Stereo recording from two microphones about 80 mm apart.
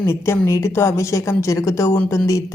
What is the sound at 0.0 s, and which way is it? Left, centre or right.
Speech, left.